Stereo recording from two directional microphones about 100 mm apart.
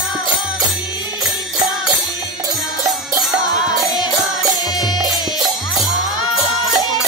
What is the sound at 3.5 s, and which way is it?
Music, 45° left (ahead or behind).